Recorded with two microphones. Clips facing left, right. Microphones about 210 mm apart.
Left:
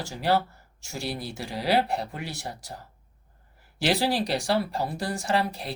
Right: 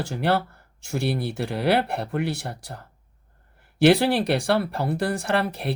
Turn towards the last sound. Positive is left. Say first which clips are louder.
# right 2 dB
turn(degrees=-60)  # may be behind; listen again after turning